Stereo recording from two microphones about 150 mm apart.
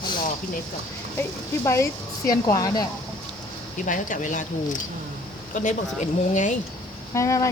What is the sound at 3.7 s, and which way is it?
Speech, 60° left (ahead or behind).